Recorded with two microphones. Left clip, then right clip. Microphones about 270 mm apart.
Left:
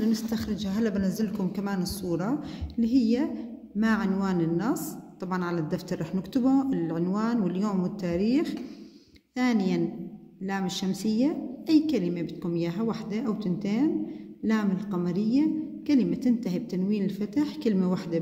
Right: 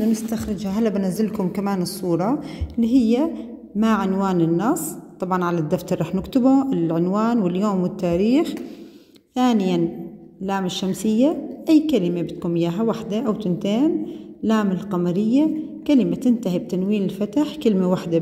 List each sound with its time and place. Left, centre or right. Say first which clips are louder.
0.1 s a woman's voice: right 5 dB; centre